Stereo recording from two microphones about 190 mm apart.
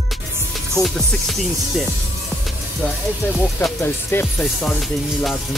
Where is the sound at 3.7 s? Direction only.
10° left (ahead or behind).